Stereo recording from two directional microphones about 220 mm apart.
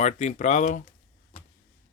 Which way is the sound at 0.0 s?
30° left (ahead or behind).